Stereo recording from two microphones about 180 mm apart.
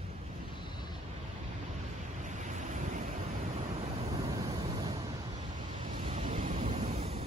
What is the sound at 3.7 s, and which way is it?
Vehicle, 35° right (ahead or behind).